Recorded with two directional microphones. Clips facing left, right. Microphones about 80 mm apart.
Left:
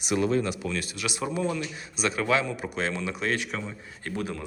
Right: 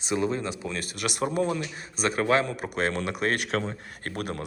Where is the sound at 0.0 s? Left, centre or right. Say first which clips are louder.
Left 2 dB; right.